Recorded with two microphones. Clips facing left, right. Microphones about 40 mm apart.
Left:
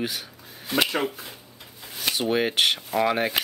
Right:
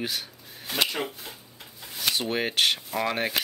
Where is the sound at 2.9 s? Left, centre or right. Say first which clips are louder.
Left 4 dB; centre.